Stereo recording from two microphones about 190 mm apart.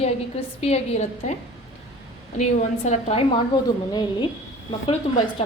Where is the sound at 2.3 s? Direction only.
35° left (ahead or behind).